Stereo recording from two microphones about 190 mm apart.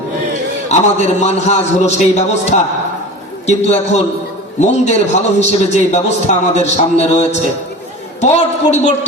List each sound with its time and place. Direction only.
0.7 s a man's voice: 35° left (ahead or behind)
3.7 s a man's voice: 35° left (ahead or behind)